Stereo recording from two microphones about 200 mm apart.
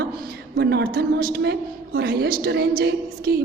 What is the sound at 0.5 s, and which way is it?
A woman's voice, 60° right (ahead or behind).